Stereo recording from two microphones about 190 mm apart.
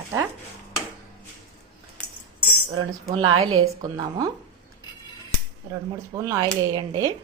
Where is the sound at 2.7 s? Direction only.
25° right (ahead or behind).